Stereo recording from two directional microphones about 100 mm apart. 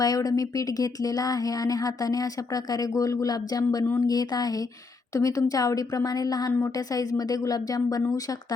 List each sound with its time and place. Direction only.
0.0 s speech: 40° left (ahead or behind)